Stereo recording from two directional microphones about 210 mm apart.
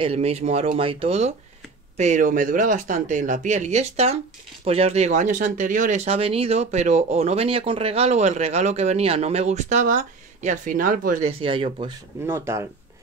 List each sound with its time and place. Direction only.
0.0 s speech: 30° right (ahead or behind)
11.2 s speech: 25° right (ahead or behind)
12.3 s speech: 15° right (ahead or behind)